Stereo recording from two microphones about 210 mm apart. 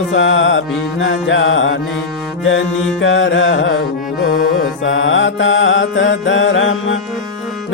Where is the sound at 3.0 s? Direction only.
60° left (ahead or behind).